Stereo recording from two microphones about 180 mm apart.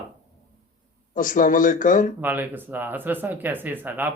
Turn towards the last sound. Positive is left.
turn(degrees=-10)  # may be behind; listen again after turning